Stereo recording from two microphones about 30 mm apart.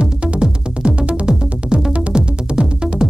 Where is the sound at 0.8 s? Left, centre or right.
Right.